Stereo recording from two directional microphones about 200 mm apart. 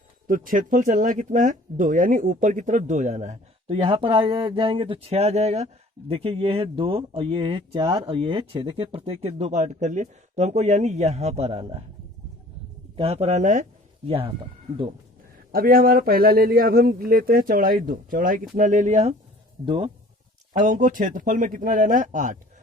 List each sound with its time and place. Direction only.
0.3 s speech: 45° right (ahead or behind)
3.8 s speech: 25° right (ahead or behind)
13.0 s speech: 30° right (ahead or behind)
14.1 s speech: 30° right (ahead or behind)
15.5 s speech: 45° right (ahead or behind)
19.6 s speech: 25° right (ahead or behind)
20.5 s speech: 40° right (ahead or behind)